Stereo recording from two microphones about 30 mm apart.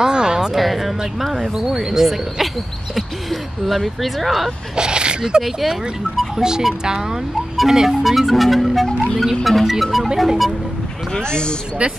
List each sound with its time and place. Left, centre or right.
0.0 s a sound: right
0.6 s speech: centre
1.6 s speech: centre
4.7 s speech: right
8.0 s speech: centre
11.1 s speech: left
11.8 s speech: right